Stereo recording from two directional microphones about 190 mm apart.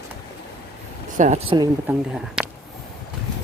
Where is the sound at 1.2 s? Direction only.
40° right (ahead or behind).